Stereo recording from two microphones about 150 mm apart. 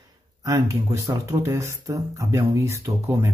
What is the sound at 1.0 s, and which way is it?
Speech, 20° right (ahead or behind).